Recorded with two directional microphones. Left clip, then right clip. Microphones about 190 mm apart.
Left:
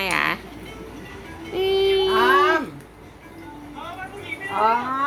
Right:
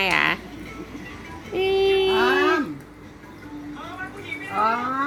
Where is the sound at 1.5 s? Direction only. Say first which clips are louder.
Even; 5° left (ahead or behind).